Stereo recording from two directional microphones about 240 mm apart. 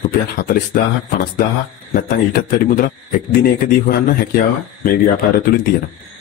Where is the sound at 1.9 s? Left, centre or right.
Left.